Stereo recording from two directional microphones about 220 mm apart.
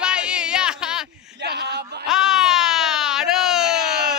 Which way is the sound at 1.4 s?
50° right (ahead or behind).